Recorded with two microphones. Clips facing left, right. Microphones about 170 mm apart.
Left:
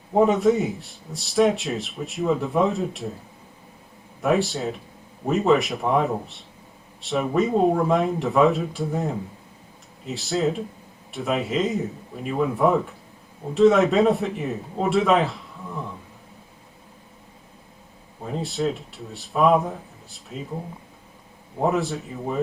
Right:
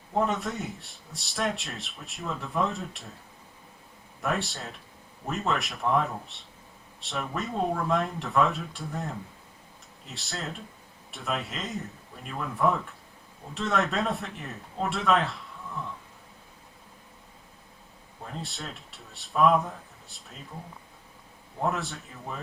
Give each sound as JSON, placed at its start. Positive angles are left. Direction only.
{"t": 0.2, "sound": "speech", "side_deg": 0}
{"t": 4.2, "sound": "speech", "side_deg": 0}
{"t": 18.2, "sound": "speech", "side_deg": 5}
{"t": 21.6, "sound": "speech", "side_deg": 0}